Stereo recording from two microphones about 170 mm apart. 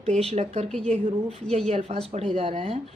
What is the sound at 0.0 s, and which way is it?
A woman's voice, 40° right (ahead or behind).